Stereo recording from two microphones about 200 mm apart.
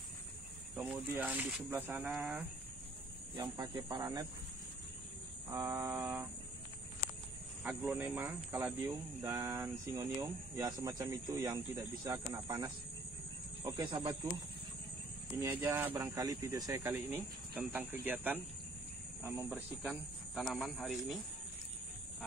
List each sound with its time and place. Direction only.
0.7 s speech: 10° right (ahead or behind)
3.3 s speech: 20° right (ahead or behind)
5.5 s speech: 15° right (ahead or behind)
7.6 s speech: 10° right (ahead or behind)
15.4 s speech: 10° right (ahead or behind)
19.5 s speech: centre (ahead or behind)